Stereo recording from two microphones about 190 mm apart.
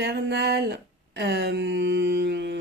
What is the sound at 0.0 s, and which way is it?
Speech, 60° right (ahead or behind).